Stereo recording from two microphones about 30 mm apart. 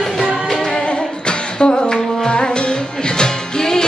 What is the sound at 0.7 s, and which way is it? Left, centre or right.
Music, left.